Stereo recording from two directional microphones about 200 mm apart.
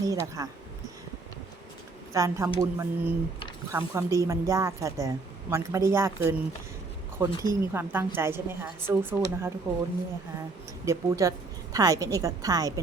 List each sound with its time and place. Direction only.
0.0 s speech: 15° right (ahead or behind)
2.1 s speech: 15° right (ahead or behind)
10.8 s speech: 15° right (ahead or behind)